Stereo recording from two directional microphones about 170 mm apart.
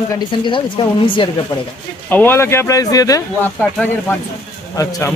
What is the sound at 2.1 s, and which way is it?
Speech, 10° left (ahead or behind).